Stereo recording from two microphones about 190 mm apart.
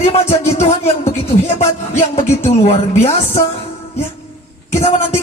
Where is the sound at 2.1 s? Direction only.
30° left (ahead or behind).